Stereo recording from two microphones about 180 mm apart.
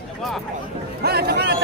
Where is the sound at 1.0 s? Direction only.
60° right (ahead or behind).